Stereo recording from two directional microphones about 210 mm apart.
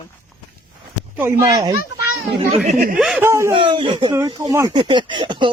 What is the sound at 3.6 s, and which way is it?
Speech, 25° right (ahead or behind).